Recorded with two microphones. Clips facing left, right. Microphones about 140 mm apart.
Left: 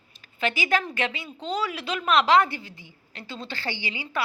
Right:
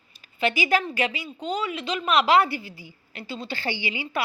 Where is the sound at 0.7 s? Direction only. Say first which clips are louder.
Right 2 dB; 5° right (ahead or behind).